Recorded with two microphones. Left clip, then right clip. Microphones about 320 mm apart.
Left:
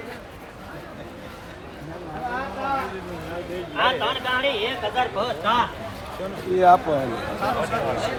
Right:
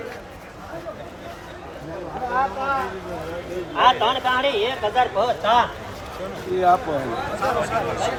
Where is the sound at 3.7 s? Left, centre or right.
Right.